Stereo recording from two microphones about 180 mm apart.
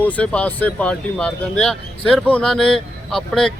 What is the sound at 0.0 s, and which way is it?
Speech, 10° left (ahead or behind).